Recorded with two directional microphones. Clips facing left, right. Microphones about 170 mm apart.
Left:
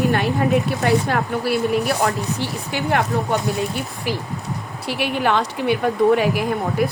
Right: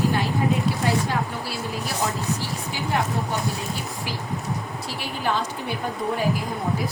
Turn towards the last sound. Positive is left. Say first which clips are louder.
# left 6 dB
turn(degrees=75)  # may be behind; listen again after turning